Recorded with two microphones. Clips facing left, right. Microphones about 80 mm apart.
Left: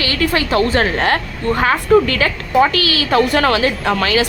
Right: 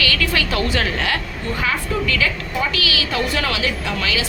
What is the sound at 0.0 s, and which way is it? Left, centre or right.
A woman's voice, left.